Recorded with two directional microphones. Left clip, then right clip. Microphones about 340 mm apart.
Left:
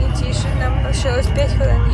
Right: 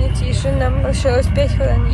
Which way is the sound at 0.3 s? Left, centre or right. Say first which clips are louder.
Right 6 dB; centre.